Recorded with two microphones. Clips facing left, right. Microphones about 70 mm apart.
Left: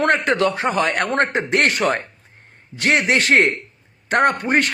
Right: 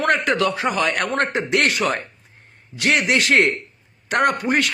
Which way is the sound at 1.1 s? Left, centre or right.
Left.